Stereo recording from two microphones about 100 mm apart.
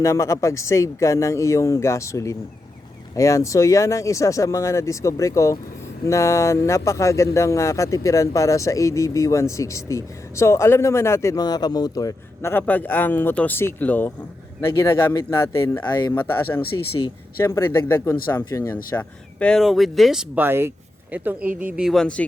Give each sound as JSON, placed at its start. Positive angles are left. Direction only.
{"t": 0.0, "sound": "speech", "side_deg": 30}
{"t": 11.3, "sound": "speech", "side_deg": 40}
{"t": 14.6, "sound": "speech", "side_deg": 25}
{"t": 19.6, "sound": "speech", "side_deg": 0}
{"t": 20.3, "sound": "speech", "side_deg": -20}
{"t": 21.8, "sound": "speech", "side_deg": 5}